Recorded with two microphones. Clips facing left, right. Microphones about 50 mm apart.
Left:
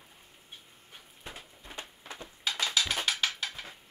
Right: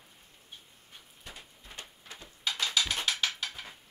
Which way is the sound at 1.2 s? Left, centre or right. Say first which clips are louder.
Left 3 dB; left.